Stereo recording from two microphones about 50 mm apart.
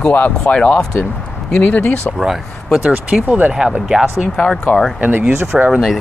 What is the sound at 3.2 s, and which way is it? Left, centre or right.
Speech, right.